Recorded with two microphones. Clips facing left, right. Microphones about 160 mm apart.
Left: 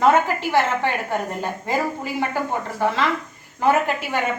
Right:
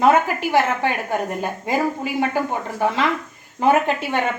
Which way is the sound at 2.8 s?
15° right (ahead or behind).